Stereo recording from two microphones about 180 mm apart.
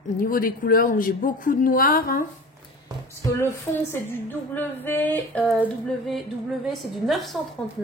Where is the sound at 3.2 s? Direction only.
15° left (ahead or behind).